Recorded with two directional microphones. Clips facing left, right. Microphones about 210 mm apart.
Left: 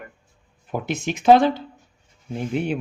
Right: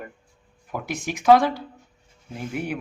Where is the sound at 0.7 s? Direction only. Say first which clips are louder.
Left 4 dB; 25° left (ahead or behind).